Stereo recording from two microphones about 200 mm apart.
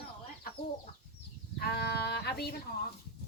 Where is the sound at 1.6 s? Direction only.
55° left (ahead or behind).